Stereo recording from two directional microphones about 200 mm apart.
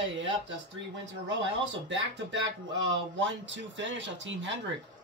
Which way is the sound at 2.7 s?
60° right (ahead or behind).